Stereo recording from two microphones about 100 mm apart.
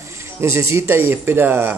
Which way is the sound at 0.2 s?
30° right (ahead or behind).